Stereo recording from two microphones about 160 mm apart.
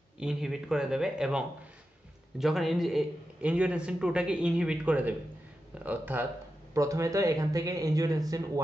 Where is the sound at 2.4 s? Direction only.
Centre (ahead or behind).